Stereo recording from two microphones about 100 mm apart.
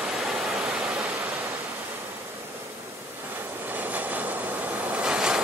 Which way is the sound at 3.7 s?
15° right (ahead or behind).